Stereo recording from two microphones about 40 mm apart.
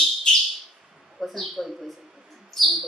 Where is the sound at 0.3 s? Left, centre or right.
Left.